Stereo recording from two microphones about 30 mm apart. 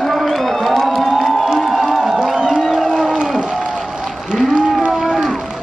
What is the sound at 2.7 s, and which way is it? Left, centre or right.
Cattle, centre.